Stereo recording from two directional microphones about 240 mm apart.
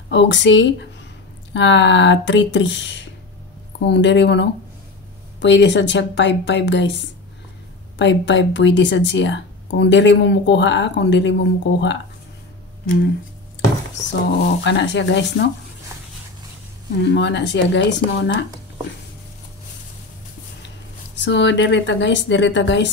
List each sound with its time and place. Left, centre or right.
0.1 s speech: left
8.0 s speech: left
14.6 s speech: left
17.0 s speech: left
21.2 s speech: left